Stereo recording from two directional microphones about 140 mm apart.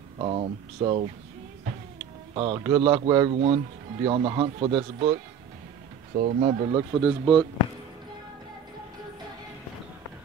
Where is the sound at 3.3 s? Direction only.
40° right (ahead or behind).